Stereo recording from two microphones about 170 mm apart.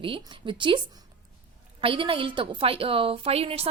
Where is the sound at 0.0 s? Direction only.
30° right (ahead or behind).